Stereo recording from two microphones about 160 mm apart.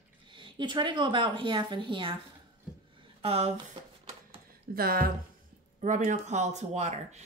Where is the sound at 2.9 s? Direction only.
35° right (ahead or behind).